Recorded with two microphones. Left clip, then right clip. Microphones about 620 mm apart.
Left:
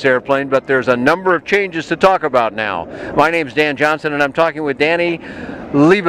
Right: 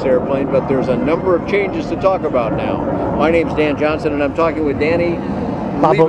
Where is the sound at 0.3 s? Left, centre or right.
Left.